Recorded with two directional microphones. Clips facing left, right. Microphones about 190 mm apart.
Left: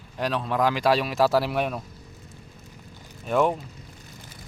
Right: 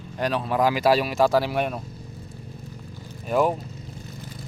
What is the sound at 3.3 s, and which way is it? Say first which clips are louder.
Speech: right 1 dB; 5° right (ahead or behind).